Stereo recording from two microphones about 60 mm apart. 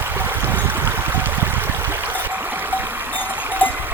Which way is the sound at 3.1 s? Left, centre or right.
Right.